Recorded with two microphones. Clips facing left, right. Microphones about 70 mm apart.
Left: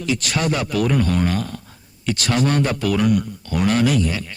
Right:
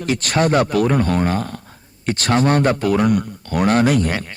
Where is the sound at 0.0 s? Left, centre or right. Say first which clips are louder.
Right 4 dB; right.